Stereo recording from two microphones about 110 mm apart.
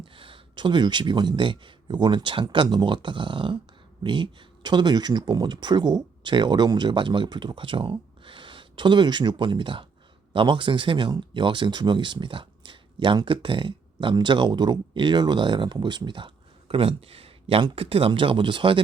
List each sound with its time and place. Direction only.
0.0 s speech: 50° right (ahead or behind)